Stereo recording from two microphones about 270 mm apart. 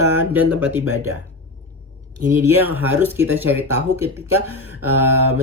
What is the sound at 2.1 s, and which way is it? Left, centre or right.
Speech, right.